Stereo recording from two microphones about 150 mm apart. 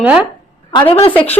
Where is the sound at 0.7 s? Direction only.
35° left (ahead or behind).